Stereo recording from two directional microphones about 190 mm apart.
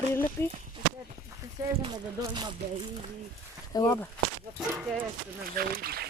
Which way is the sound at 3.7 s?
20° left (ahead or behind).